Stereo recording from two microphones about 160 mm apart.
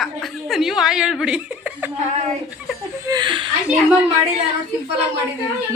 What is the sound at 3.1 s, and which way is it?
Speech, 30° right (ahead or behind).